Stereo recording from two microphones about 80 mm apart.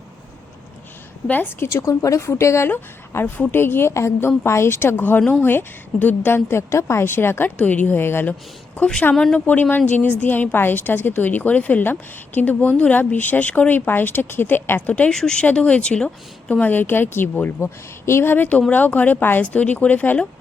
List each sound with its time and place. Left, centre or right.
1.3 s a woman's voice: left
9.1 s a woman's voice: centre
15.1 s a woman's voice: centre